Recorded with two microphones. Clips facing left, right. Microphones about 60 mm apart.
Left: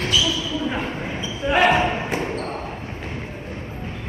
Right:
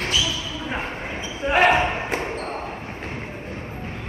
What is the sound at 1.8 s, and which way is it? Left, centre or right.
Basketball bounce, centre.